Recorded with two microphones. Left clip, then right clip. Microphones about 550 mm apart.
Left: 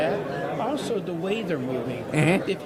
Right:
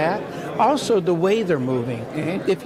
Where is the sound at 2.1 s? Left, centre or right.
Left.